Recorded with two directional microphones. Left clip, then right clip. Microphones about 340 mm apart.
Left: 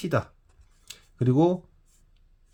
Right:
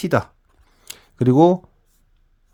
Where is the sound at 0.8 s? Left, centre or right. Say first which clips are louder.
Right 9 dB; right.